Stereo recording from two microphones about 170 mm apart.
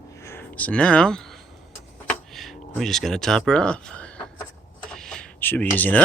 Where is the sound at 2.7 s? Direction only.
Centre (ahead or behind).